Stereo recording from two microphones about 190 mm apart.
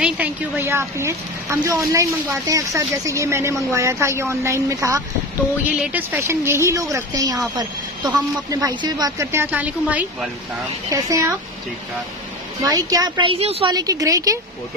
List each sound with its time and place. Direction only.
0.0 s a woman's voice: 10° right (ahead or behind)
12.6 s a woman's voice: 20° right (ahead or behind)